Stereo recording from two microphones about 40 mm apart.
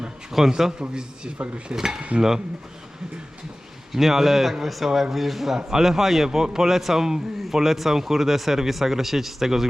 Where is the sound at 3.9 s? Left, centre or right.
Centre.